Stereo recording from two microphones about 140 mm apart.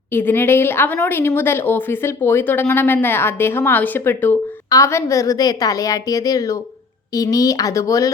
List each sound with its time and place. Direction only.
0.1 s a woman's voice: 15° left (ahead or behind)